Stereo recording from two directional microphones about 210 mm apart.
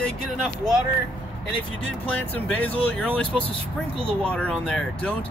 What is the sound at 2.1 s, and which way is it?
Speech, 10° left (ahead or behind).